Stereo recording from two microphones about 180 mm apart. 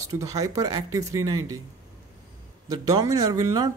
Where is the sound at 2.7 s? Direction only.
20° right (ahead or behind).